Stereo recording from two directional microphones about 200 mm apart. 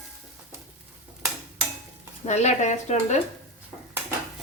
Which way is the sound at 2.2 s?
35° left (ahead or behind).